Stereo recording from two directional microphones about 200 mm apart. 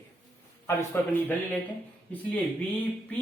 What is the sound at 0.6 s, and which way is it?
Speech, 10° left (ahead or behind).